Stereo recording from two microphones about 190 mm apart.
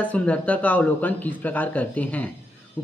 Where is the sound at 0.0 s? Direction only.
5° left (ahead or behind).